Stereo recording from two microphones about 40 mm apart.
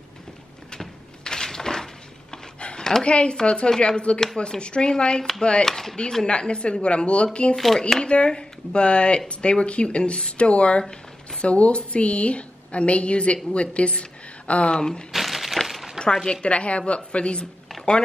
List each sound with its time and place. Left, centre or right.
0.7 s a sound: centre
3.1 s speech: left
5.7 s speech: centre
6.2 s speech: left
7.5 s speech: centre
8.0 s a woman's voice: left
14.8 s speech: centre
15.1 s a sound: centre
16.3 s speech: left
17.8 s a sound: centre